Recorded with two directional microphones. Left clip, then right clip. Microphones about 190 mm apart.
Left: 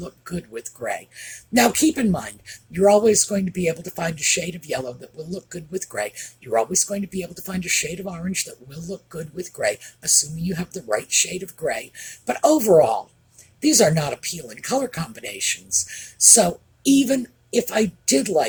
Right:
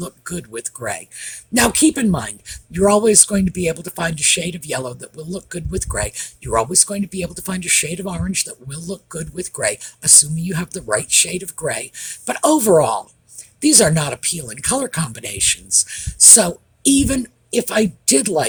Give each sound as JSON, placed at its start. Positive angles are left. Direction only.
{"t": 0.0, "sound": "speech", "side_deg": -50}